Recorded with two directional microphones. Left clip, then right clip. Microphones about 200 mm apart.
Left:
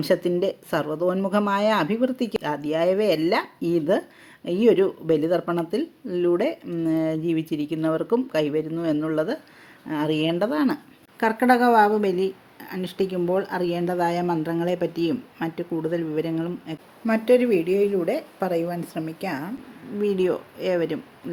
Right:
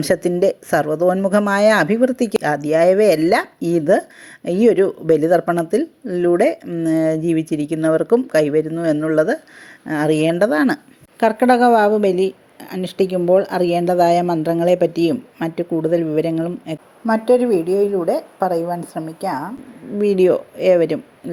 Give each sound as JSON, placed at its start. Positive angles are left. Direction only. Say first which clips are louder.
{"t": 0.0, "sound": "a woman's voice", "louder": "right 6 dB", "side_deg": -20}
{"t": 17.1, "sound": "a woman's voice", "louder": "right 4 dB", "side_deg": -10}
{"t": 20.0, "sound": "a woman's voice", "louder": "right 8 dB", "side_deg": -25}